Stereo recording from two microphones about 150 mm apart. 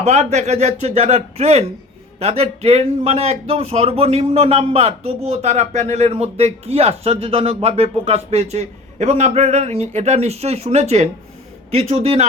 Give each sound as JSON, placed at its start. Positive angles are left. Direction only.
{"t": 0.0, "sound": "speech", "side_deg": -50}